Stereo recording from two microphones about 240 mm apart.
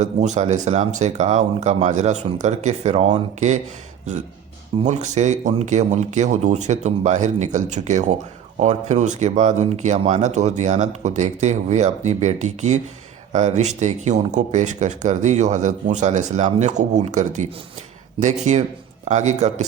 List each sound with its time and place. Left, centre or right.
0.0 s speech: right
4.8 s speech: right